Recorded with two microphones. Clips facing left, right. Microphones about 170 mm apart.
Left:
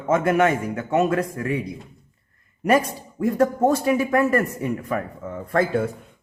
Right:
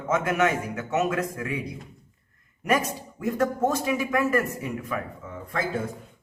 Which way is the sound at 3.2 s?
35° left (ahead or behind).